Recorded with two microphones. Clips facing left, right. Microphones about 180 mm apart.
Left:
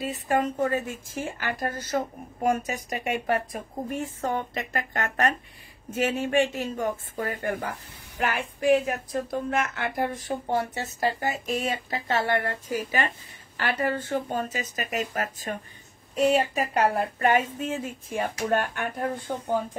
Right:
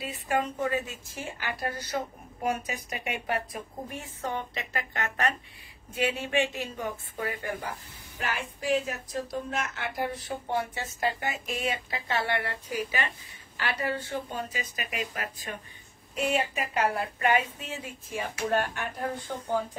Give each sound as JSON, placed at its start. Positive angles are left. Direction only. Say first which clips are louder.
{"t": 0.0, "sound": "a woman's voice", "louder": "left 4 dB", "side_deg": 40}
{"t": 8.2, "sound": "a woman's voice", "louder": "left 6 dB", "side_deg": 60}